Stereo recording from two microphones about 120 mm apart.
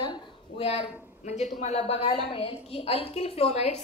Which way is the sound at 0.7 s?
60° left (ahead or behind).